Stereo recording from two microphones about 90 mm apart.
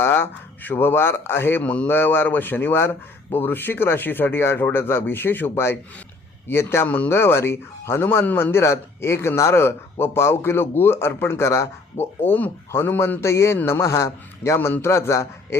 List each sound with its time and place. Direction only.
0.0 s speech: 25° left (ahead or behind)
1.6 s speech: 15° left (ahead or behind); by 12.0 s 35° left (ahead or behind)
12.2 s a man's voice: 20° left (ahead or behind)